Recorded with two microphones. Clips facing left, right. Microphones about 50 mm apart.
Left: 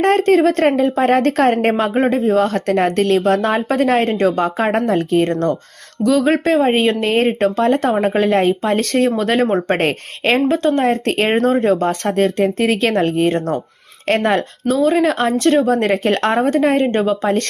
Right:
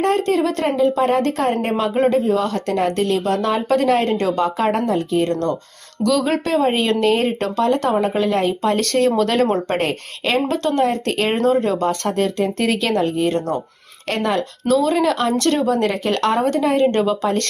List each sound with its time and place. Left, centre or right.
0.0 s a woman's voice: left
1.8 s speech: left
6.0 s speech: left
8.6 s speech: left
9.7 s speech: left
10.5 s speech: left
10.8 s speech: left
14.7 s speech: left
15.6 s speech: left
16.8 s speech: left